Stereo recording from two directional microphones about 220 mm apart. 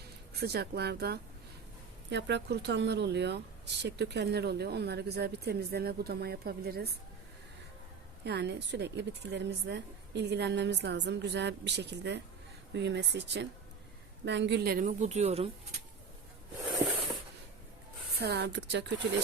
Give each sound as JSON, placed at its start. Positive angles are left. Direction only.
{"t": 0.3, "sound": "a woman's voice", "side_deg": -45}
{"t": 8.2, "sound": "a woman's voice", "side_deg": -50}
{"t": 18.2, "sound": "a woman's voice", "side_deg": -45}